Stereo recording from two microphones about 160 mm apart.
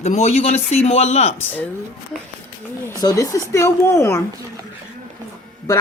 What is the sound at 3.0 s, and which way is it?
Speech, 20° left (ahead or behind).